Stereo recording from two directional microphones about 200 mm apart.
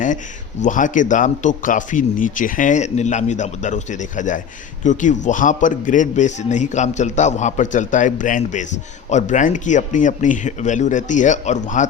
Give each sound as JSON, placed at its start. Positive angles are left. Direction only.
{"t": 0.6, "sound": "a man's voice", "side_deg": 40}